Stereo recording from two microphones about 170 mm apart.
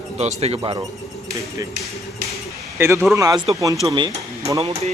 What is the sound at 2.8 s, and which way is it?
Speech, 15° right (ahead or behind).